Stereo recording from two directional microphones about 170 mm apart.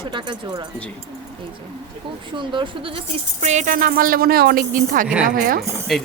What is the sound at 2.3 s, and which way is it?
Speech, 30° right (ahead or behind).